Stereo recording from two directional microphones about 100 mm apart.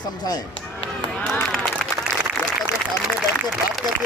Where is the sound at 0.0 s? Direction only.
45° left (ahead or behind).